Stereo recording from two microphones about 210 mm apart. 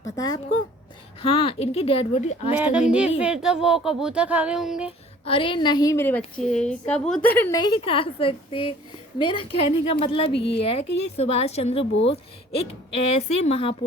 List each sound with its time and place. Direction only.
1.2 s a woman's voice: 25° left (ahead or behind)
2.5 s speech: 5° right (ahead or behind)
4.9 s a woman's voice: 25° left (ahead or behind); by 7.6 s 10° left (ahead or behind)
7.6 s a woman's voice: 25° left (ahead or behind)
10.3 s a woman's voice: 55° left (ahead or behind)
10.6 s a woman's voice: 30° left (ahead or behind)